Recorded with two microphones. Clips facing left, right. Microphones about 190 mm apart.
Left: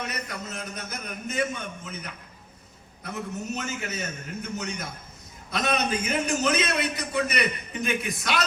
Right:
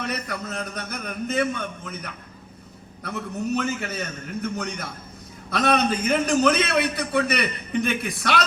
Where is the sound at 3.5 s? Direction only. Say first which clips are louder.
Right 9 dB; 60° right (ahead or behind).